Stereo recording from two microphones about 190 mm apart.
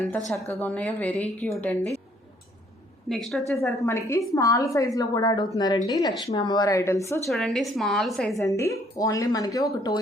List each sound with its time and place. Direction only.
0.6 s speech: 10° left (ahead or behind)
3.1 s a woman's voice: centre (ahead or behind)
3.8 s speech: 15° left (ahead or behind)
7.3 s a woman's voice: centre (ahead or behind)
8.4 s speech: 15° left (ahead or behind)